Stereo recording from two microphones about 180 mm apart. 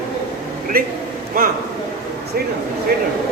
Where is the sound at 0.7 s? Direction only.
55° right (ahead or behind).